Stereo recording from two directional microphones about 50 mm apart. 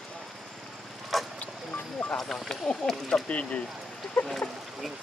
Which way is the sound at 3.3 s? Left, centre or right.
Left.